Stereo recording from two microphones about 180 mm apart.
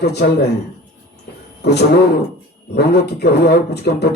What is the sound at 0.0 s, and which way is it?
Speech, 65° left (ahead or behind).